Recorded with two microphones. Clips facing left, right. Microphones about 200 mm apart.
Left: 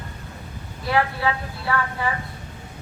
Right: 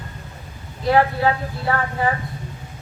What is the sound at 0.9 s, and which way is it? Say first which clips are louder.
Speech: right 5 dB; 40° right (ahead or behind).